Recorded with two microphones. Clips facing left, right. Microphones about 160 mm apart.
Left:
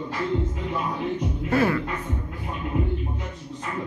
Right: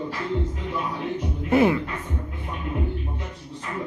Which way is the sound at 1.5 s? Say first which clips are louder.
Right 3 dB; 20° right (ahead or behind).